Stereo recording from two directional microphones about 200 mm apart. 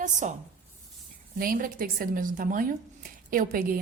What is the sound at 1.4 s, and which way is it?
A woman's voice, 45° right (ahead or behind).